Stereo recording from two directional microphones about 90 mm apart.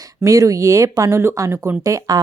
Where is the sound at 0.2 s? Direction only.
40° right (ahead or behind).